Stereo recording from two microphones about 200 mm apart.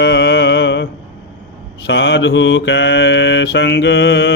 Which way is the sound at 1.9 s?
65° left (ahead or behind).